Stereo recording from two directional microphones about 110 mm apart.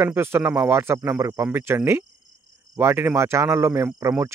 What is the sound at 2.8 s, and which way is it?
Speech, 20° right (ahead or behind).